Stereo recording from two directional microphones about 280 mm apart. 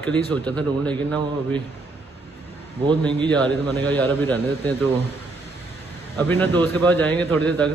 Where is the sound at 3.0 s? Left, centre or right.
Centre.